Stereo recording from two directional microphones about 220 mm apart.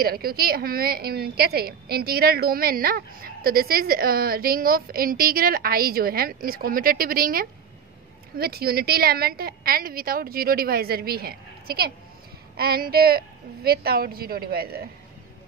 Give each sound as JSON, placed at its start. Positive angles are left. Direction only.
{"t": 0.0, "sound": "a woman's voice", "side_deg": -45}